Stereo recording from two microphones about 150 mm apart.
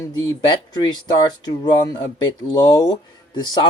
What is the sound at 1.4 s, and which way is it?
Speech, 25° left (ahead or behind).